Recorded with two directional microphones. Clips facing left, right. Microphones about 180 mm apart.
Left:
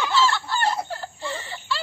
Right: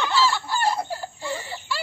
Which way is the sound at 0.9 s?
10° right (ahead or behind).